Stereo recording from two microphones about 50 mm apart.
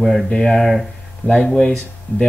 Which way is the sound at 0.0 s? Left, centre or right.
Centre.